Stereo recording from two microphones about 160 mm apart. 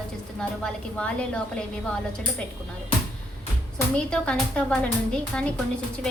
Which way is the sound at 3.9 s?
5° left (ahead or behind).